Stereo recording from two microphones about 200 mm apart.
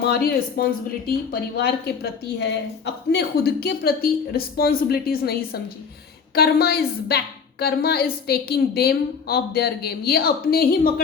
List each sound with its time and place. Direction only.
0.0 s speech: 50° left (ahead or behind)